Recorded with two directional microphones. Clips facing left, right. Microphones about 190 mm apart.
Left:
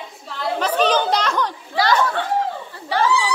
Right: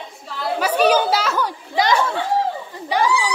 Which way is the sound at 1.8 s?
20° right (ahead or behind).